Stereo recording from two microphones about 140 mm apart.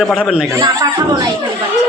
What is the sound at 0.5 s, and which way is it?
Speech, 25° right (ahead or behind).